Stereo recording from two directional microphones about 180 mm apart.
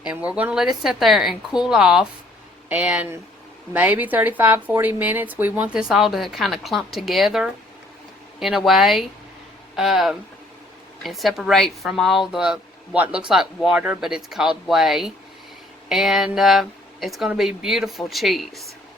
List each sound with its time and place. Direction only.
0.3 s speech: 5° right (ahead or behind)